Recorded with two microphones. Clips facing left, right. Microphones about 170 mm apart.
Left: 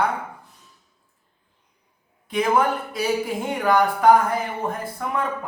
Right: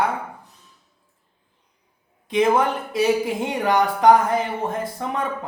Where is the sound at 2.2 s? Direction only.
20° right (ahead or behind).